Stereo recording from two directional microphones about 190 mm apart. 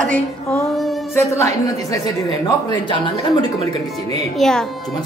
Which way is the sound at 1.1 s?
15° left (ahead or behind).